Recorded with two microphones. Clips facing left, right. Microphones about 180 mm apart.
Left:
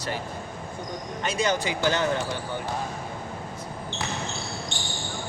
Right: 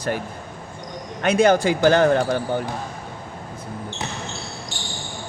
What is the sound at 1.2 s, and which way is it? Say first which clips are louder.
Speech: right 10 dB; 60° right (ahead or behind).